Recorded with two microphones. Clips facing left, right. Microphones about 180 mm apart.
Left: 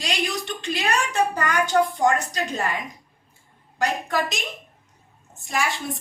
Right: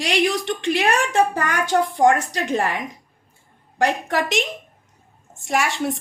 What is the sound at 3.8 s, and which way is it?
Speech, 90° right.